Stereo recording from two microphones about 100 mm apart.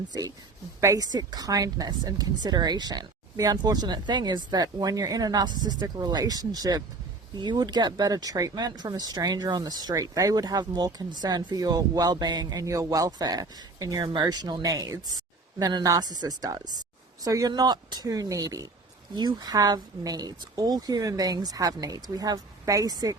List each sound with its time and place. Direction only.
0.1 s speech: 35° right (ahead or behind)
19.1 s speech: 45° right (ahead or behind)